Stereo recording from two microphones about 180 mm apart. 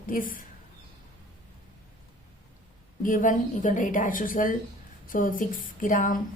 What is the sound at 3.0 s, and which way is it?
A woman's voice, 45° left (ahead or behind).